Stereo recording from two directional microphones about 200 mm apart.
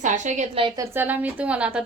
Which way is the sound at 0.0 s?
35° right (ahead or behind).